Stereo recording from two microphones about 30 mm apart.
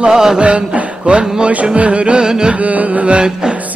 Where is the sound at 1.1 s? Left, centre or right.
Right.